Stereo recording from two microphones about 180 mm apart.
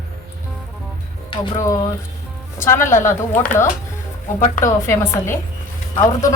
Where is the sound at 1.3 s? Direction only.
20° left (ahead or behind).